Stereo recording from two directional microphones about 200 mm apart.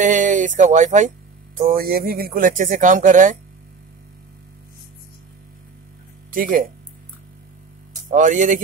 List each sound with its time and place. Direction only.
0.0 s speech: 40° right (ahead or behind)
6.3 s speech: 45° right (ahead or behind)
8.1 s speech: 40° right (ahead or behind)